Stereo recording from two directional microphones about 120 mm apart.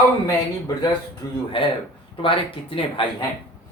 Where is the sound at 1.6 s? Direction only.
45° left (ahead or behind).